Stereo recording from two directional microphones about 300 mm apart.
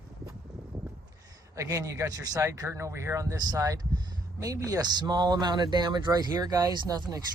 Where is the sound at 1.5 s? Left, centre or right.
Centre.